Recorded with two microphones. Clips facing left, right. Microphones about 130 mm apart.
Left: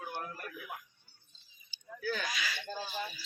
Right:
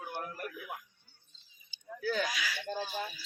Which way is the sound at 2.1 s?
10° right (ahead or behind).